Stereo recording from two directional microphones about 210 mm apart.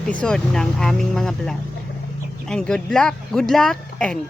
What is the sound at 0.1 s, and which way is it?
Speech, 5° left (ahead or behind).